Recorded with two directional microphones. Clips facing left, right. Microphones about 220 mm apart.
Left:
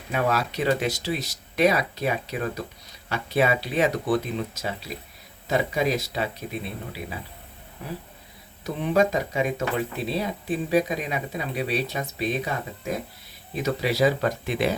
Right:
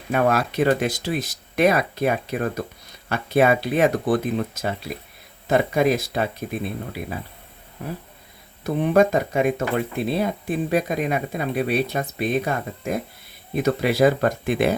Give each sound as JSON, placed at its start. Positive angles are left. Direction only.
{"t": 0.1, "sound": "speech", "side_deg": -50}
{"t": 8.6, "sound": "speech", "side_deg": -50}